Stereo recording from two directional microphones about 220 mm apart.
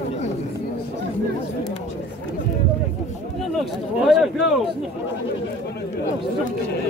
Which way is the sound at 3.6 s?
Centre (ahead or behind).